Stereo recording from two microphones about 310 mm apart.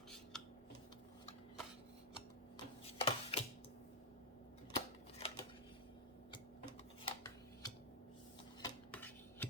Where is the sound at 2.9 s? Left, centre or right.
Centre.